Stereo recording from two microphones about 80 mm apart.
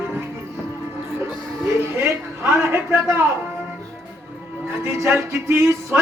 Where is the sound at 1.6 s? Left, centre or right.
Right.